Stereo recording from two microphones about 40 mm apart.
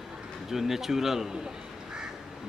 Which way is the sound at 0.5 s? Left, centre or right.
Centre.